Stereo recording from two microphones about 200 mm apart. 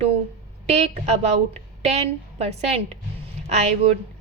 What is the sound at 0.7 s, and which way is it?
A woman's voice, 35° right (ahead or behind).